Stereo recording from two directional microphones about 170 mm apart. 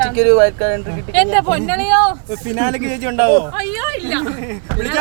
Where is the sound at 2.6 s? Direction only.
25° right (ahead or behind).